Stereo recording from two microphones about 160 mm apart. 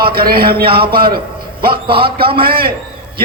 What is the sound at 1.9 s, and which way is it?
Speech, 35° right (ahead or behind).